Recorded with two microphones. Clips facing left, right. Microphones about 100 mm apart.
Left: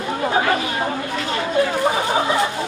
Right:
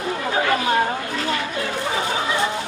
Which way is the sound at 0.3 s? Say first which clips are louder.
Left 2 dB; 30° left (ahead or behind).